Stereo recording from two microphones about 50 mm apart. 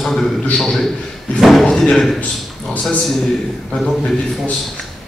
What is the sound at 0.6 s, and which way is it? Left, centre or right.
A man's voice, centre.